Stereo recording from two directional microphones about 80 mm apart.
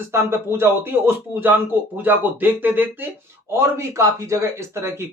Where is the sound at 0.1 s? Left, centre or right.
Right.